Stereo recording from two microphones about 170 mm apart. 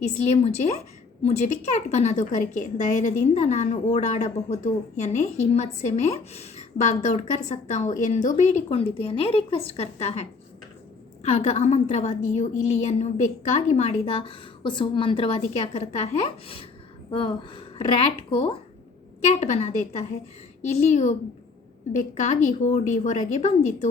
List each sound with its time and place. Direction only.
0.0 s a woman's voice: 40° left (ahead or behind)